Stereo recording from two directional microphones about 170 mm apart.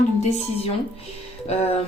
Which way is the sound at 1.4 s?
35° left (ahead or behind).